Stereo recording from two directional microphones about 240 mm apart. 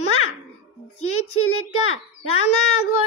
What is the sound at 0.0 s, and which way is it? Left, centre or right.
Babbling, left.